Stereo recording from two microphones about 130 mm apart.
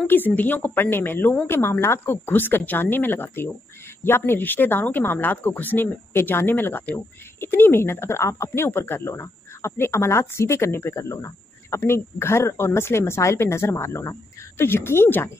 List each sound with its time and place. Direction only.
0.0 s a woman's voice: 15° left (ahead or behind)